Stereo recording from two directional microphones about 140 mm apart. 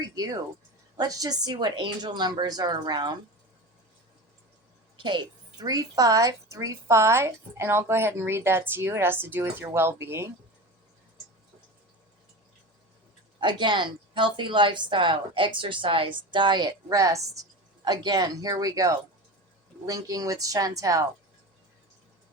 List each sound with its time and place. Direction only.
0.9 s a woman's voice: 25° right (ahead or behind)
4.9 s a woman's voice: 35° right (ahead or behind); by 10.2 s 20° right (ahead or behind)
13.4 s a woman's voice: 35° right (ahead or behind)